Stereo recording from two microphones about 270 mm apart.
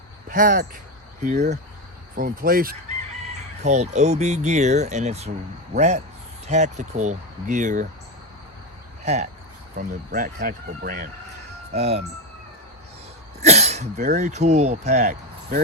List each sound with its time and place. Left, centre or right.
0.3 s speech: right
9.0 s speech: right
13.4 s speech: right